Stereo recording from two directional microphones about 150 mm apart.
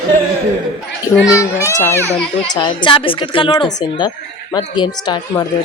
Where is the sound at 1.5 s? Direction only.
20° left (ahead or behind).